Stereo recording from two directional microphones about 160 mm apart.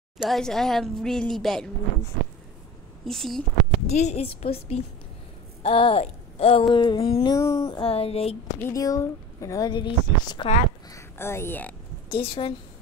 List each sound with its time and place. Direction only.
0.2 s speech: centre (ahead or behind)
3.1 s speech: centre (ahead or behind)
3.8 s a woman's voice: 45° left (ahead or behind)
5.6 s a sound: 35° left (ahead or behind)
7.3 s a woman's voice: 20° left (ahead or behind)
7.8 s a sound: 35° left (ahead or behind)
8.6 s a woman's voice: 20° left (ahead or behind)
10.9 s speech: 15° left (ahead or behind)
12.1 s a sound: 35° left (ahead or behind)